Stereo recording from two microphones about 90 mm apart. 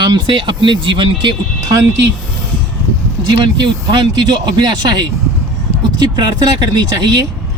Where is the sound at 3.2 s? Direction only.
55° right (ahead or behind).